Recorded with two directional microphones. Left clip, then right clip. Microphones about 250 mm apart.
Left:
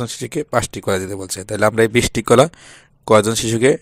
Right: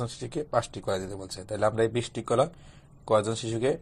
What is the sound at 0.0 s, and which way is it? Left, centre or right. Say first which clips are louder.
Speech: left 10 dB; left.